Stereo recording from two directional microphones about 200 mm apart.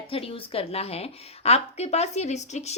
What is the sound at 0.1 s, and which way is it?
A woman's voice, 30° left (ahead or behind).